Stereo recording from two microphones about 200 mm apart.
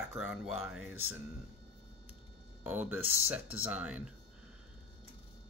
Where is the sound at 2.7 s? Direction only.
10° right (ahead or behind).